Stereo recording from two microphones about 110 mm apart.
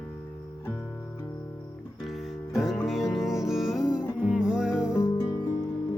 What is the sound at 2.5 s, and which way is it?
Music, 5° right (ahead or behind).